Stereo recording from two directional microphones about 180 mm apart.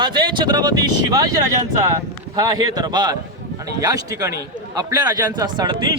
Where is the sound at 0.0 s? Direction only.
25° right (ahead or behind).